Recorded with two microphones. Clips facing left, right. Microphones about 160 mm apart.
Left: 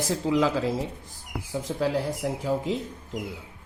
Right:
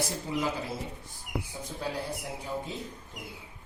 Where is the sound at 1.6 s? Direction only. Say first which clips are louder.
Left 12 dB; 90° left.